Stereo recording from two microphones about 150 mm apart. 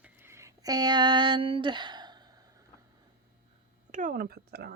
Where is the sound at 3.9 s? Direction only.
65° right (ahead or behind); by 4.7 s 90° right.